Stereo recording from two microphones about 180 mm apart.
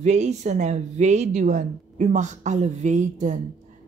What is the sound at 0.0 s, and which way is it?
Speech, 40° right (ahead or behind).